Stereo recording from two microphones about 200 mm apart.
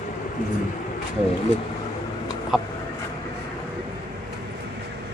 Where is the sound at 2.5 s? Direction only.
Centre (ahead or behind).